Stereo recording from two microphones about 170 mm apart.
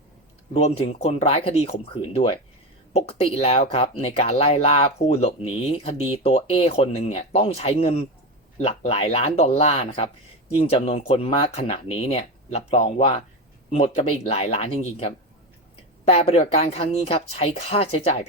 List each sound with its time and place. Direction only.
0.5 s speech: 35° left (ahead or behind)